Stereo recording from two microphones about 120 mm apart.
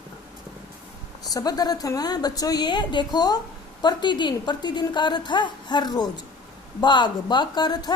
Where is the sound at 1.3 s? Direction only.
30° left (ahead or behind).